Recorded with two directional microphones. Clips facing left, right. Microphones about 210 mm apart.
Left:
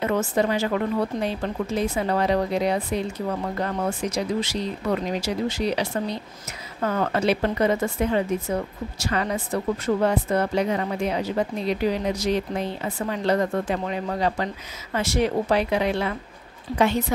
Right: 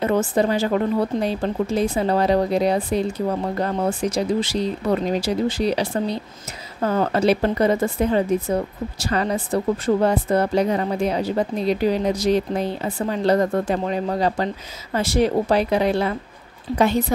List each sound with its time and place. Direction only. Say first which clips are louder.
0.0 s speech: right 3 dB; 30° right (ahead or behind)